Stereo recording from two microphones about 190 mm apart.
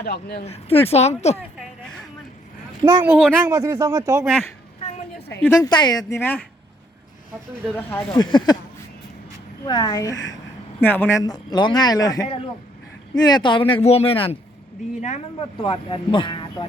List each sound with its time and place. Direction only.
0.0 s speech: 60° left (ahead or behind)
0.4 s speech: 30° left (ahead or behind)
3.0 s speech: 10° right (ahead or behind)
4.8 s a sound: 30° left (ahead or behind)
5.4 s a woman's voice: 15° left (ahead or behind)
7.7 s a woman's voice: 10° left (ahead or behind)
8.2 s speech: 25° left (ahead or behind)
9.6 s a woman's voice: 25° left (ahead or behind)
11.2 s speech: 20° left (ahead or behind)